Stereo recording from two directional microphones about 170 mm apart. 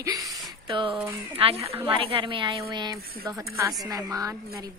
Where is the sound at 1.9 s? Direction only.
30° right (ahead or behind).